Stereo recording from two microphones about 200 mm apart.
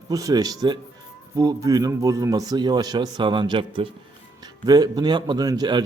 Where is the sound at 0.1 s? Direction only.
15° right (ahead or behind).